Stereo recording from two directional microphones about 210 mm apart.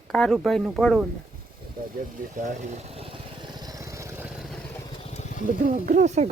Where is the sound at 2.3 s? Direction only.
35° right (ahead or behind); by 4.3 s 15° right (ahead or behind).